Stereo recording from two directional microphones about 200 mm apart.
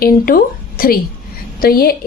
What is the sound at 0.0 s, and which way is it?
A woman's voice, 45° left (ahead or behind).